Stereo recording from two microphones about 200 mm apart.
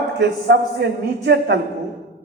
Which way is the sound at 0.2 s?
55° right (ahead or behind).